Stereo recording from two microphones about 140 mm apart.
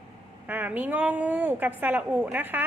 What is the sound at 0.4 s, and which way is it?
A woman's voice, 10° right (ahead or behind).